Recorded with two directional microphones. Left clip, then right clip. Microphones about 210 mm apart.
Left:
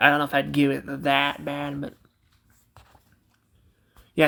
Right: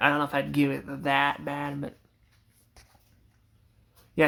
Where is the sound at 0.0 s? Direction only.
20° left (ahead or behind).